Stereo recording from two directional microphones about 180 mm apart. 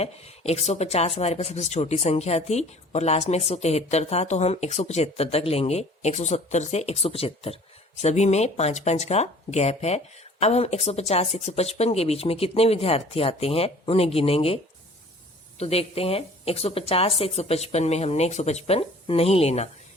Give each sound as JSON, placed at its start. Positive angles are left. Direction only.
{"t": 0.0, "sound": "speech", "side_deg": 35}